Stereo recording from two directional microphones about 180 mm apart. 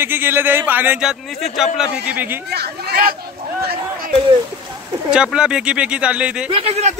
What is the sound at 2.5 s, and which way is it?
Speech, 60° right (ahead or behind).